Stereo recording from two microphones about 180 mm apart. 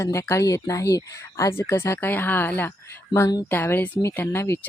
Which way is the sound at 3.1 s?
20° left (ahead or behind).